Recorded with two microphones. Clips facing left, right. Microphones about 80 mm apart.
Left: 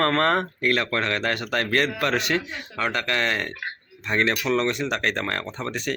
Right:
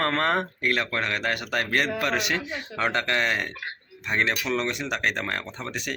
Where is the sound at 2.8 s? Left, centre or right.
Right.